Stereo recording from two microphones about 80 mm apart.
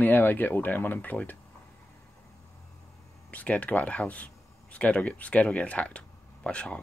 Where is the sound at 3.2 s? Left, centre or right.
Centre.